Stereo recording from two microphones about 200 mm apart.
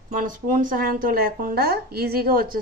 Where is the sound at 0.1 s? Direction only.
40° right (ahead or behind).